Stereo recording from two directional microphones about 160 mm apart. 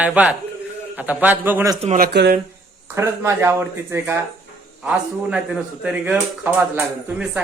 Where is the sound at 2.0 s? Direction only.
75° right (ahead or behind).